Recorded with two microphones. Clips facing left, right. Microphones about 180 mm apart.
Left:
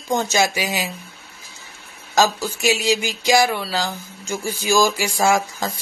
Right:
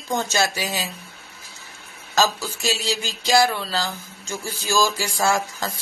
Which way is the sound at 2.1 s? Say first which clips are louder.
Left 3 dB; 15° left (ahead or behind).